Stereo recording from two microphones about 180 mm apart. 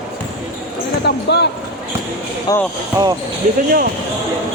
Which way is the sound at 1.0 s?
70° left (ahead or behind).